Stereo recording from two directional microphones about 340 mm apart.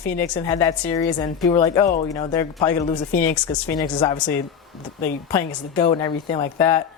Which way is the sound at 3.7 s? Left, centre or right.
Centre.